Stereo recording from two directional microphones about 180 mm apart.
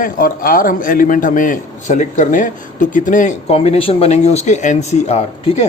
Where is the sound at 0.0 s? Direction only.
50° left (ahead or behind).